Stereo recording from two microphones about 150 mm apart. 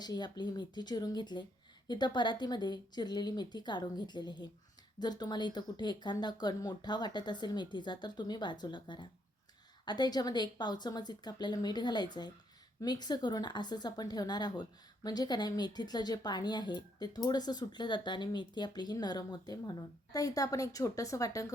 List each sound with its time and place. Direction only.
0.0 s speech: 30° left (ahead or behind)